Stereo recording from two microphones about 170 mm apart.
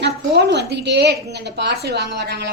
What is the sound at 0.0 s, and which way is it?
A woman's voice, 80° right.